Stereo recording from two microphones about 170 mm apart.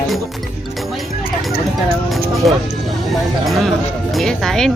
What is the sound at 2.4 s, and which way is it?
Speech, centre (ahead or behind).